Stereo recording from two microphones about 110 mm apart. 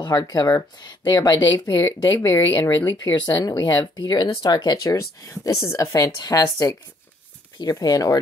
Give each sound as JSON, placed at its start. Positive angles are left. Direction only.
{"t": 0.0, "sound": "speech", "side_deg": 35}
{"t": 4.8, "sound": "a woman's voice", "side_deg": 30}